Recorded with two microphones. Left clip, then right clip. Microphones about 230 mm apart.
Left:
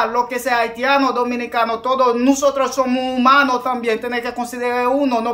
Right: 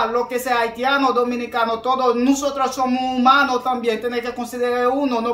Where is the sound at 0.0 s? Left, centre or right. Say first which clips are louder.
Left 2 dB; centre.